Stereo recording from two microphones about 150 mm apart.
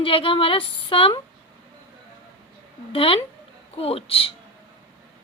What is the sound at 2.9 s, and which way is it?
Speech, 40° left (ahead or behind).